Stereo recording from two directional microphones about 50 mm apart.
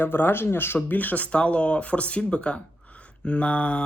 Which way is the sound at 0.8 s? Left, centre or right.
Left.